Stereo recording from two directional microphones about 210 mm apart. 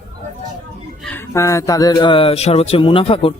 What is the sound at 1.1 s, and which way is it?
Speech, 15° left (ahead or behind).